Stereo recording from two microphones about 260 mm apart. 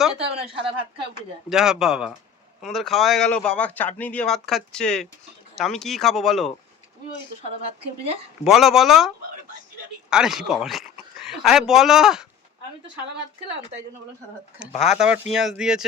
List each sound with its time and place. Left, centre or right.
0.2 s speech: right
1.5 s speech: centre
8.4 s speech: centre
14.8 s speech: centre